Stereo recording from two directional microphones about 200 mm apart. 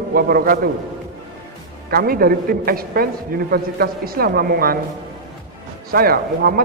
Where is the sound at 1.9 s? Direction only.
50° right (ahead or behind).